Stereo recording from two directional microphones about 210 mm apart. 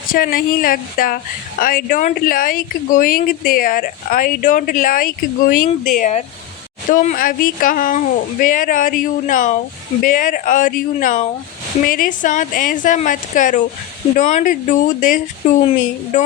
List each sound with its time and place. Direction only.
0.1 s a woman's voice: 45° left (ahead or behind)